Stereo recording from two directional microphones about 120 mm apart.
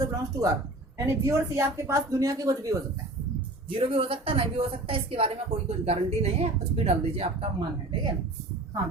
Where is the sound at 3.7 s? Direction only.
50° right (ahead or behind).